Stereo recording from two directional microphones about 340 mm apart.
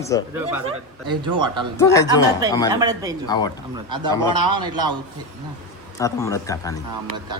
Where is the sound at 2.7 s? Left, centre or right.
Centre.